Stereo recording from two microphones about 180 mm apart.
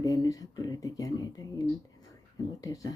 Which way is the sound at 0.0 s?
20° left (ahead or behind).